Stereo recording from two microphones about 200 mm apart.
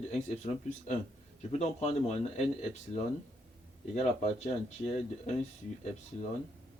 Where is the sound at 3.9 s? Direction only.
35° left (ahead or behind).